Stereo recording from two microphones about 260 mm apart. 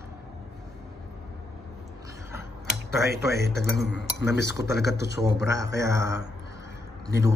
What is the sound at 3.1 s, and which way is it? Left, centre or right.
Speech, right.